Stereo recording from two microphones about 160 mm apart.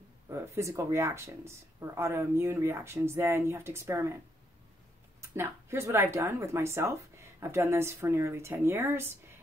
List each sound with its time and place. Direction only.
0.3 s speech: 20° right (ahead or behind)
5.2 s speech: 15° right (ahead or behind)